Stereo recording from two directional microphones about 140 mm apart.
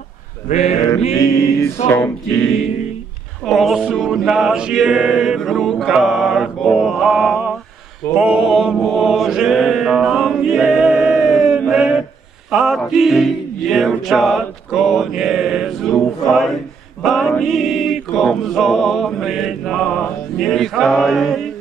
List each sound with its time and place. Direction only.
0.5 s a sound: 55° left (ahead or behind)
1.2 s music: 25° left (ahead or behind)
1.9 s a capella: 15° left (ahead or behind)
3.4 s a capella: centre (ahead or behind)
8.1 s mantra: 5° right (ahead or behind)
12.4 s music: 5° right (ahead or behind)
17.0 s a capella: centre (ahead or behind)